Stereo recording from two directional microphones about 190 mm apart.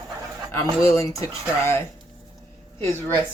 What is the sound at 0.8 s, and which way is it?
Speech, 15° left (ahead or behind).